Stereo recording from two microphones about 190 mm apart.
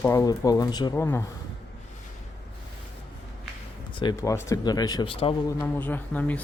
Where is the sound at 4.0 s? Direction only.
20° left (ahead or behind).